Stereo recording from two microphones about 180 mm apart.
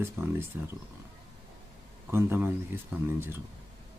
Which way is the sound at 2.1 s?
10° right (ahead or behind).